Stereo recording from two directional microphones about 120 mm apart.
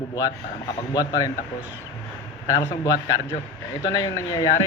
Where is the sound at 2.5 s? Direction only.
25° left (ahead or behind).